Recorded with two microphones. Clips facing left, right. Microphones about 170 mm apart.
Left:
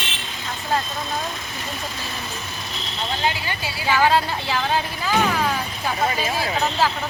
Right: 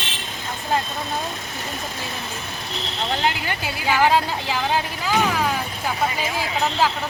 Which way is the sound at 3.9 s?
15° right (ahead or behind).